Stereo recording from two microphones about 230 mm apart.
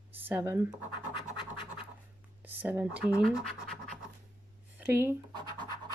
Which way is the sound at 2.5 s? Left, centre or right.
Centre.